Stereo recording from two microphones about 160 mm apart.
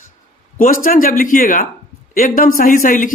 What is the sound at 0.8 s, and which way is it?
Speech, 60° left (ahead or behind).